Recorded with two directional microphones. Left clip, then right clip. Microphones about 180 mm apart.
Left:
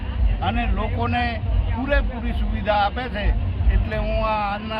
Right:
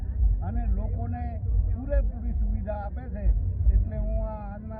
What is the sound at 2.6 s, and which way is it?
Speech, 25° left (ahead or behind).